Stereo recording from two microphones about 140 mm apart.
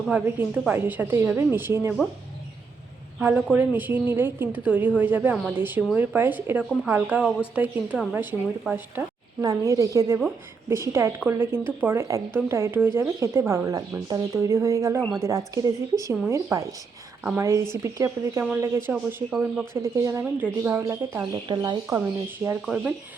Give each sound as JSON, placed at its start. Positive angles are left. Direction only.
{"t": 0.1, "sound": "a woman's voice", "side_deg": -10}
{"t": 3.2, "sound": "a woman's voice", "side_deg": -10}
{"t": 19.7, "sound": "speech", "side_deg": -20}
{"t": 21.4, "sound": "speech", "side_deg": -30}
{"t": 22.6, "sound": "speech", "side_deg": -5}